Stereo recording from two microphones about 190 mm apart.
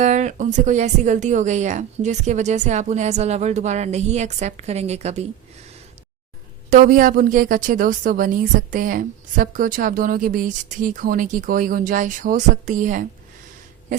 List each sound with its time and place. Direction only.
0.0 s speech: 40° right (ahead or behind)
6.7 s a woman's voice: 45° right (ahead or behind)